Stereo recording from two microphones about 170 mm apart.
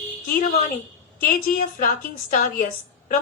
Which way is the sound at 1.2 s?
55° left (ahead or behind).